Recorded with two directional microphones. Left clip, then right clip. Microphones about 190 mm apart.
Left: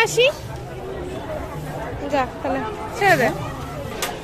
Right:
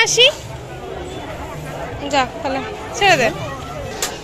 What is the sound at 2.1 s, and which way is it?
A woman's voice, 5° left (ahead or behind).